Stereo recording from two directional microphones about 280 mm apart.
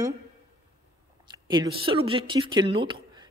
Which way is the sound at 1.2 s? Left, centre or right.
Centre.